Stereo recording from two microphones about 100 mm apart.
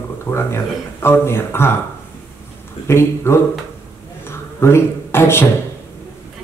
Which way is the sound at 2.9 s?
25° left (ahead or behind).